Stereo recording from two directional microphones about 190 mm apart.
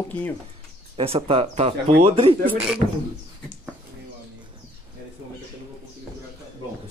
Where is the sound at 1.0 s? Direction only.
30° right (ahead or behind).